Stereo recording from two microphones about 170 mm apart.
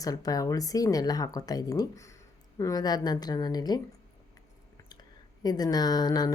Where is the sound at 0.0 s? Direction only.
20° left (ahead or behind).